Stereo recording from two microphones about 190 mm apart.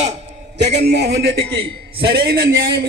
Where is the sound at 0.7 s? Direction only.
60° right (ahead or behind).